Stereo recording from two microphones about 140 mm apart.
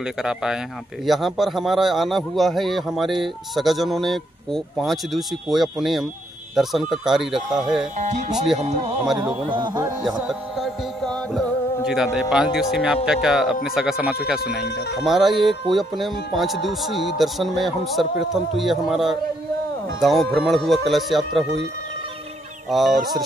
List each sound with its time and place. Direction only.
0.0 s a man's voice: 5° right (ahead or behind)
8.5 s speech: 50° right (ahead or behind)
9.5 s a man's voice: 35° right (ahead or behind)
10.0 s music: centre (ahead or behind)
13.7 s a man's voice: 5° right (ahead or behind)
22.7 s a man's voice: centre (ahead or behind)